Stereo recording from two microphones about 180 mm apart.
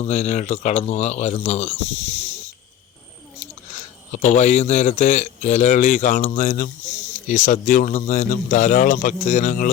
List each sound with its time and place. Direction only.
0.0 s a man's voice: 40° left (ahead or behind)
4.2 s a man's voice: 40° left (ahead or behind)